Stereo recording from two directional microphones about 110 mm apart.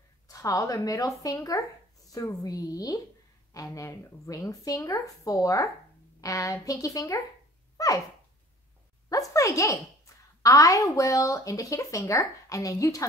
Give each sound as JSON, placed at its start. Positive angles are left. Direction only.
{"t": 0.3, "sound": "speech", "side_deg": 30}
{"t": 7.7, "sound": "a sound", "side_deg": 30}
{"t": 9.1, "sound": "a woman's voice", "side_deg": 30}